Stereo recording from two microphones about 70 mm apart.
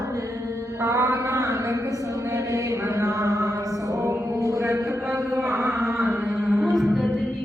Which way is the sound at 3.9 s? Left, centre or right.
Right.